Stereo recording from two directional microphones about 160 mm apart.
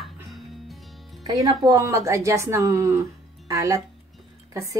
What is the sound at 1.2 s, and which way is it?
A woman's voice, 20° right (ahead or behind).